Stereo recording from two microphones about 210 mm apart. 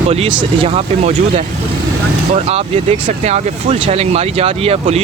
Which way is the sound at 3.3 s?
30° right (ahead or behind).